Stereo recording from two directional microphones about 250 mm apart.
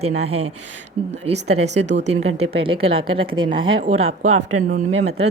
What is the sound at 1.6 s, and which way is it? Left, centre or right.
Speech, right.